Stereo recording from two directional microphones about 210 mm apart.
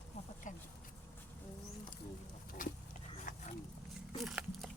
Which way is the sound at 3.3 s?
40° left (ahead or behind).